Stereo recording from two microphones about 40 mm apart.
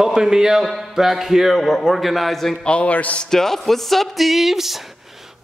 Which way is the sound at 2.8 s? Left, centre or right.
Left.